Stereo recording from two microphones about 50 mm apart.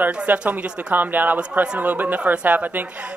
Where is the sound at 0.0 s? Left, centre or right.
Right.